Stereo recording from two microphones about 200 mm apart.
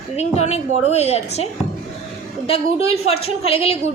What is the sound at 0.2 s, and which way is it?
A woman's voice, 30° left (ahead or behind).